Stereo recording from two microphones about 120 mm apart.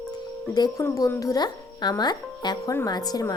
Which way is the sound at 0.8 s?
25° left (ahead or behind).